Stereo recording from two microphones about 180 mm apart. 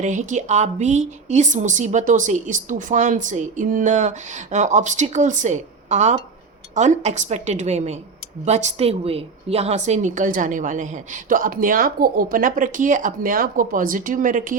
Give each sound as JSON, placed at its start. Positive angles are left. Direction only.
{"t": 0.0, "sound": "a woman's voice", "side_deg": -45}